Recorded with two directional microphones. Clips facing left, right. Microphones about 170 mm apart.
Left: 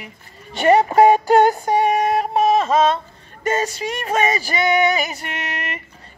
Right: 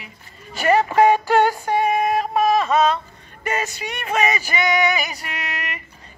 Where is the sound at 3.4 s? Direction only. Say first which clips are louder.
Left 4 dB; 30° left (ahead or behind).